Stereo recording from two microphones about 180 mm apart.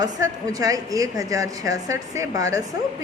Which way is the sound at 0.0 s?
20° right (ahead or behind).